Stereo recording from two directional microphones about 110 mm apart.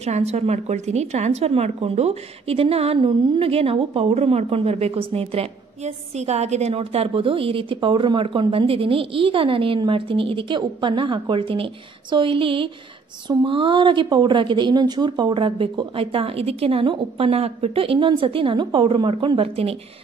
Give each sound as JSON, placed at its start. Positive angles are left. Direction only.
{"t": 0.0, "sound": "a woman's voice", "side_deg": -75}
{"t": 17.3, "sound": "a woman's voice", "side_deg": -65}